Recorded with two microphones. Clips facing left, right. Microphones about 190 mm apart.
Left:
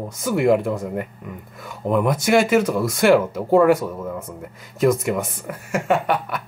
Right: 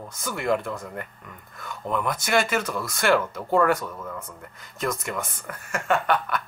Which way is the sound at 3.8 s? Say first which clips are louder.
Left 7 dB; 20° left (ahead or behind).